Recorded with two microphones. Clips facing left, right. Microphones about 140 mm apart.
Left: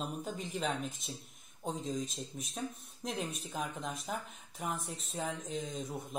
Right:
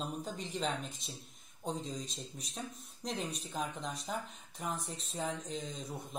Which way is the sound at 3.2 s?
Centre (ahead or behind).